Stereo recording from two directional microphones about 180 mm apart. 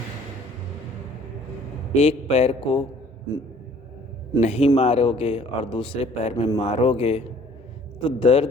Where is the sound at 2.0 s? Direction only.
35° left (ahead or behind).